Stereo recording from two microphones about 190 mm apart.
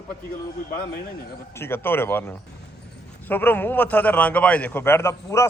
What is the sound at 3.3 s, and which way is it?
A man's voice, 10° left (ahead or behind).